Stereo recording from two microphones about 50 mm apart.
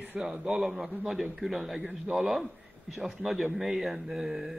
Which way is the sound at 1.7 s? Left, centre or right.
Right.